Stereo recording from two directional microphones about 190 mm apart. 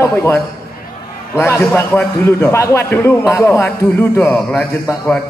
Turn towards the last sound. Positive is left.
turn(degrees=15)  # may be behind; listen again after turning